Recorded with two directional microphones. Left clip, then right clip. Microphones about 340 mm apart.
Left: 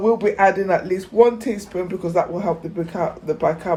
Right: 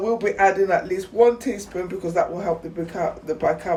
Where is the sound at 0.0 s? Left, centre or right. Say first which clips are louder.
Left 3 dB; centre.